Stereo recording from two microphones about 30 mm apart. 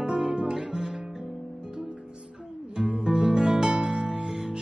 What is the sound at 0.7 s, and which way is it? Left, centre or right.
Music, centre.